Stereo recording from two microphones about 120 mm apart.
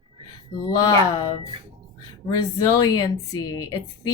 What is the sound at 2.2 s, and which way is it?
A woman's voice, 30° left (ahead or behind).